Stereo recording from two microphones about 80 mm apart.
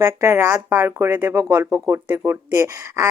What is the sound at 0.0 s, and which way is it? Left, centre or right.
Speech, right.